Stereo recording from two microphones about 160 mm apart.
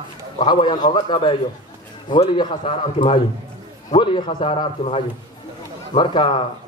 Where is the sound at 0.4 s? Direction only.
30° left (ahead or behind).